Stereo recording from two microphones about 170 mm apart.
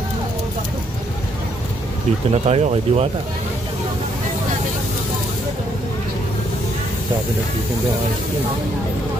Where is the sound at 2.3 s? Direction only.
40° right (ahead or behind).